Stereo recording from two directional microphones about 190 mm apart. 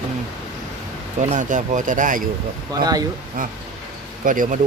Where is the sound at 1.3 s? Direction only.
40° right (ahead or behind).